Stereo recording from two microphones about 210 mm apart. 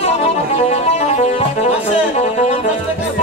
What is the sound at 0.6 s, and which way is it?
Speech, 30° left (ahead or behind).